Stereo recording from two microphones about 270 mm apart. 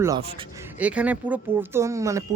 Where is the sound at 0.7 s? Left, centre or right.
Centre.